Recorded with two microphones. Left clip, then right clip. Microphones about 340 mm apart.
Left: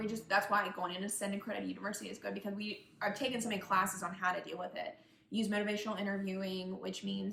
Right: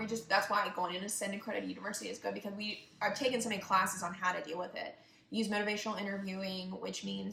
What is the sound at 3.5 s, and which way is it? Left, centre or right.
Speech, centre.